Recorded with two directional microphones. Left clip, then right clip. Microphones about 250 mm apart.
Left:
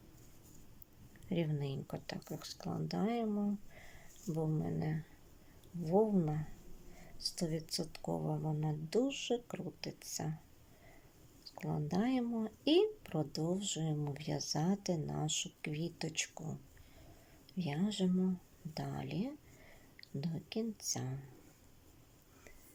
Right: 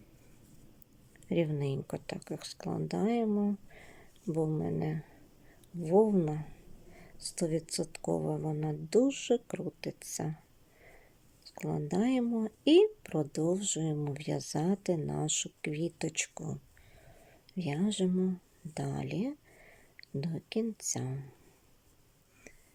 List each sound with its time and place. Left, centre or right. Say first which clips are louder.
1.3 s speech: right 7 dB; centre
11.4 s speech: right 5 dB; centre